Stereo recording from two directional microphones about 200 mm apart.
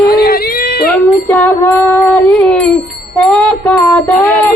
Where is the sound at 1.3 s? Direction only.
10° left (ahead or behind).